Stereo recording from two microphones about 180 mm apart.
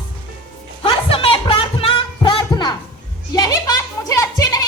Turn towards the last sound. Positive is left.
turn(degrees=20)  # may be behind; listen again after turning